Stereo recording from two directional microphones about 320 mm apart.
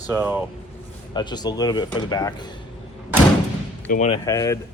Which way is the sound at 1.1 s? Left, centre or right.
Centre.